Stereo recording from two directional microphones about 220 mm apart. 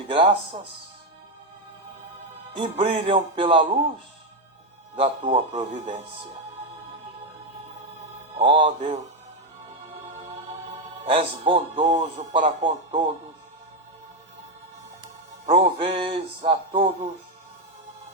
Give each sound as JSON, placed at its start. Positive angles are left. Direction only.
{"t": 0.1, "sound": "a man's voice", "side_deg": -25}
{"t": 2.6, "sound": "a man's voice", "side_deg": -25}
{"t": 4.9, "sound": "a man's voice", "side_deg": -20}
{"t": 5.5, "sound": "a man's voice", "side_deg": -30}
{"t": 8.4, "sound": "a man's voice", "side_deg": -25}
{"t": 11.0, "sound": "a man's voice", "side_deg": -25}
{"t": 15.4, "sound": "a man's voice", "side_deg": -25}